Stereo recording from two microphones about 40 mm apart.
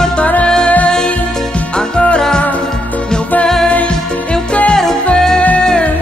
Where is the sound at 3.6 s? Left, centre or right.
Left.